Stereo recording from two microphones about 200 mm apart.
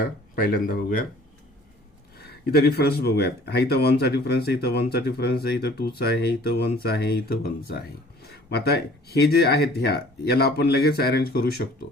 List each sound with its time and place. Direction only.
0.7 s speech: 45° left (ahead or behind)
2.1 s speech: 50° left (ahead or behind)